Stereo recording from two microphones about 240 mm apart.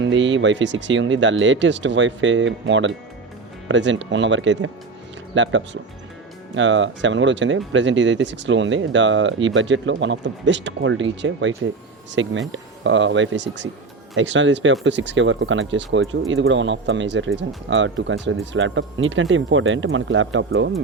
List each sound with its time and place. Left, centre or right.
0.0 s speech: right